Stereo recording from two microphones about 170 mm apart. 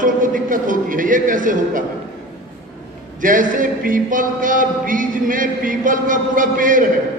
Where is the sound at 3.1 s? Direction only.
50° right (ahead or behind).